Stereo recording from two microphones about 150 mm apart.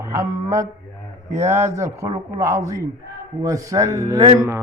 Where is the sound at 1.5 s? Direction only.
20° right (ahead or behind).